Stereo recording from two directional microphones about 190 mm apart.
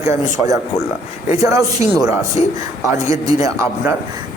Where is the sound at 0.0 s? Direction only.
15° right (ahead or behind).